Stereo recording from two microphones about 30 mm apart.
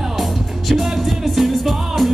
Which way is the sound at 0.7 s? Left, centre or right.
Centre.